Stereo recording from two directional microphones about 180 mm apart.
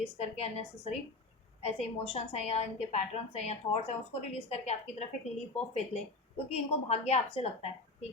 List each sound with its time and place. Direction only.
0.0 s a woman's voice: 35° left (ahead or behind)